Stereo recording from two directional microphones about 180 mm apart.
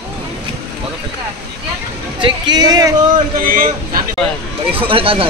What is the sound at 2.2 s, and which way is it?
Speech, 25° right (ahead or behind).